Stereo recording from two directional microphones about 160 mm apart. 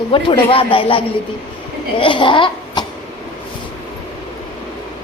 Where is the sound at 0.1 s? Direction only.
35° left (ahead or behind).